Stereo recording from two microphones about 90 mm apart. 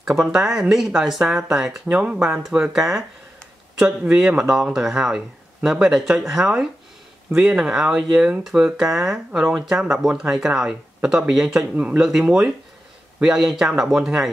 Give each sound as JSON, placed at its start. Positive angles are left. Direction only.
{"t": 0.0, "sound": "speech", "side_deg": -5}
{"t": 11.7, "sound": "speech", "side_deg": -20}
{"t": 12.0, "sound": "speech", "side_deg": -5}